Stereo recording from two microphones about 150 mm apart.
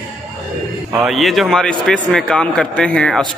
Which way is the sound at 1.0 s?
Centre (ahead or behind).